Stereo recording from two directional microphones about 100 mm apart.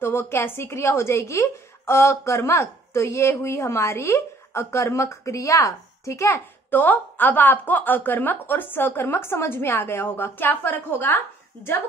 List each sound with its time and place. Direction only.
0.0 s a woman's voice: 25° left (ahead or behind)